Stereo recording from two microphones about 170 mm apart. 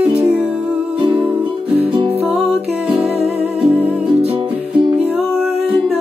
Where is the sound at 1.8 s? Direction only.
35° right (ahead or behind).